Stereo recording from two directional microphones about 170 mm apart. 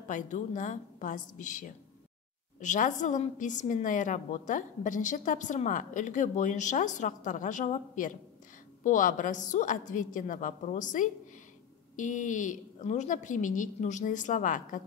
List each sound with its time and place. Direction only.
0.1 s a woman's voice: 45° left (ahead or behind)